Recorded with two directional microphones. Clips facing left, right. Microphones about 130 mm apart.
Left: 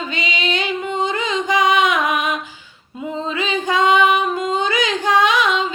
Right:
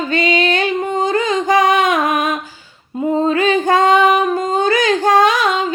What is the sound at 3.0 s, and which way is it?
Female singing, 50° right (ahead or behind).